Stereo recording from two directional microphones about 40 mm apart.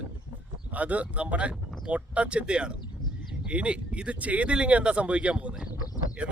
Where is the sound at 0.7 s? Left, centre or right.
Right.